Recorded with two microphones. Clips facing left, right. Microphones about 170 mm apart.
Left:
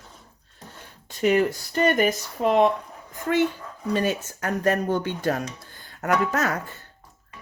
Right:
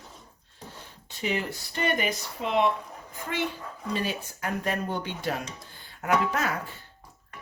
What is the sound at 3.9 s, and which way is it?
Speech, 45° left (ahead or behind).